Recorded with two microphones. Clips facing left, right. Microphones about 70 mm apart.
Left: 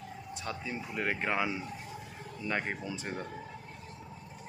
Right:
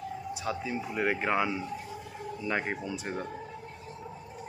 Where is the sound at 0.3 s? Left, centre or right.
Centre.